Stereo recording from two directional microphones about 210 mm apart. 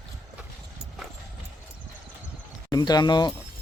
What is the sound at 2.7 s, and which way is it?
Speech, 20° left (ahead or behind).